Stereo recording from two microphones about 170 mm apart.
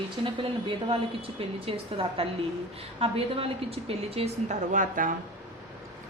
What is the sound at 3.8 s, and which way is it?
Speech, 35° right (ahead or behind).